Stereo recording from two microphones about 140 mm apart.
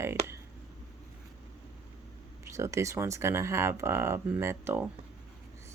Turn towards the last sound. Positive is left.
turn(degrees=-15)  # may be behind; listen again after turning